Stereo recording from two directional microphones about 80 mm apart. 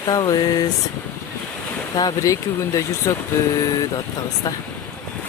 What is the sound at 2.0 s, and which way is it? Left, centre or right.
Speech, left.